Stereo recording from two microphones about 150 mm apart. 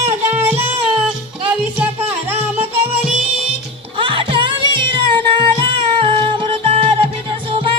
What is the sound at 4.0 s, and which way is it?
Music, 35° right (ahead or behind).